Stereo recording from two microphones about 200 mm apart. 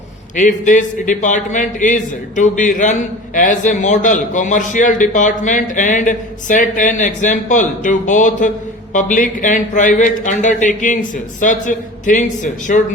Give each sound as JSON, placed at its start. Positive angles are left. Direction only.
{"t": 0.3, "sound": "a man's voice", "side_deg": 40}